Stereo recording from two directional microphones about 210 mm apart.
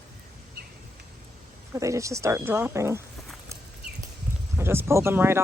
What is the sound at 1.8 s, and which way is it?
Speech, 15° right (ahead or behind).